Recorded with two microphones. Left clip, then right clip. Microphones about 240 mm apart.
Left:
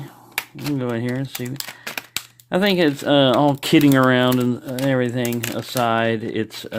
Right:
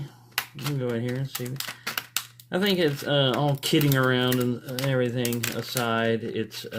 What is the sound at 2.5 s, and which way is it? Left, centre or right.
Speech, left.